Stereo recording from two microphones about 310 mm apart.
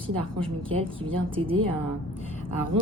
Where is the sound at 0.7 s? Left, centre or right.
Centre.